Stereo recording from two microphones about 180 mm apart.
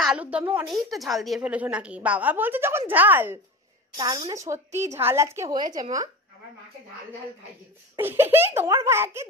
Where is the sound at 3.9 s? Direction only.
25° right (ahead or behind).